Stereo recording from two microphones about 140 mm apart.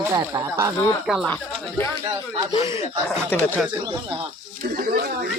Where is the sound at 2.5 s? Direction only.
40° left (ahead or behind).